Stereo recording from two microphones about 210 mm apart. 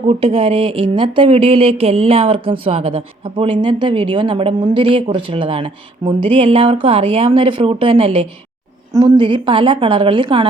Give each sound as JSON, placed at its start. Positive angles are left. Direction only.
{"t": 0.1, "sound": "speech", "side_deg": -25}